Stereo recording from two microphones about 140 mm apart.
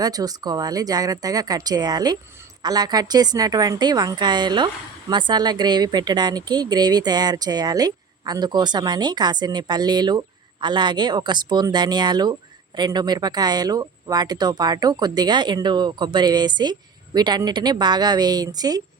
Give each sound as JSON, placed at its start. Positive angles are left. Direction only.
{"t": 0.0, "sound": "a woman's voice", "side_deg": -25}